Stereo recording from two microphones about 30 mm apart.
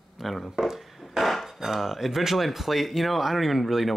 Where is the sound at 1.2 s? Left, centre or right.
Centre.